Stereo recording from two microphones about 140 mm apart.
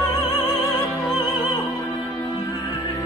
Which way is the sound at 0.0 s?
30° left (ahead or behind).